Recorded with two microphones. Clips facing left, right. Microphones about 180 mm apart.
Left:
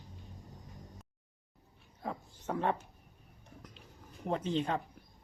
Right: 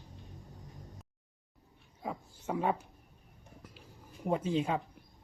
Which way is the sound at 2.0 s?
5° right (ahead or behind).